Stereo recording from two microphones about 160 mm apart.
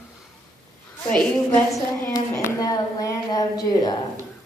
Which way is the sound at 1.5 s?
20° left (ahead or behind).